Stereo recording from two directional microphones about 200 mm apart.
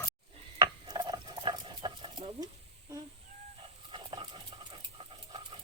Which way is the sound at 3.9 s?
25° right (ahead or behind).